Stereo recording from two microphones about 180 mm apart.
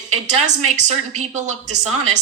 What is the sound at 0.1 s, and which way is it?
Speech, 40° right (ahead or behind).